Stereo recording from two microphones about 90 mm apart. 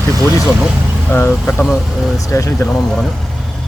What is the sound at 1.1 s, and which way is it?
Speech, 25° left (ahead or behind).